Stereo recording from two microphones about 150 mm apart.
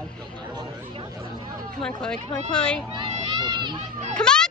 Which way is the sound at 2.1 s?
45° right (ahead or behind).